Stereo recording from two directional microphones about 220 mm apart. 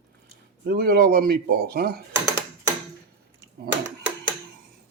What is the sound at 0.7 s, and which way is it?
Speech, 45° right (ahead or behind).